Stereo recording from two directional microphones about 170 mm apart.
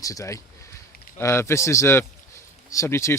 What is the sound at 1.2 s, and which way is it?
A man's voice, 15° left (ahead or behind).